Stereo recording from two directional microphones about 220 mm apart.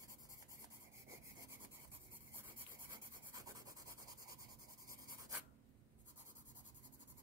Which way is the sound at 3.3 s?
15° right (ahead or behind).